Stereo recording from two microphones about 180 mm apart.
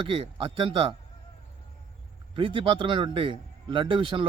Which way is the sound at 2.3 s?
30° right (ahead or behind).